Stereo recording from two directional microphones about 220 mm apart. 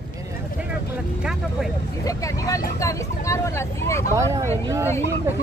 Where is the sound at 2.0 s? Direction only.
15° left (ahead or behind).